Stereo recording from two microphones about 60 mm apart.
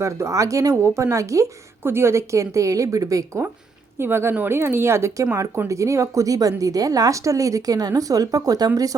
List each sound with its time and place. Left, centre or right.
0.0 s speech: right
0.8 s a woman's voice: right
1.8 s a woman's voice: right
3.9 s speech: right
5.6 s a woman's voice: right